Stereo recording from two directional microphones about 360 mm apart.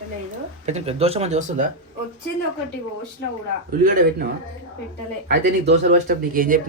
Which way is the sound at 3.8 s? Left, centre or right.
Right.